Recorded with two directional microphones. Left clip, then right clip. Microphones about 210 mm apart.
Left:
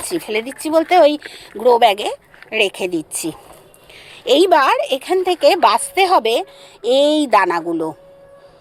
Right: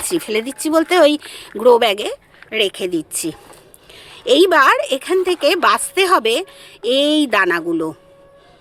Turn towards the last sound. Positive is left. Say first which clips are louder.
# even
turn(degrees=-15)  # may be behind; listen again after turning